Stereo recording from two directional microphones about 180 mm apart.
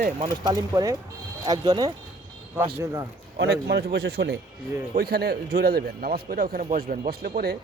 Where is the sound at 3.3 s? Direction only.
70° right (ahead or behind).